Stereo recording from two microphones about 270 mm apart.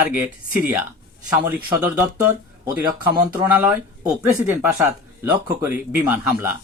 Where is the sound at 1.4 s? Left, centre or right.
Centre.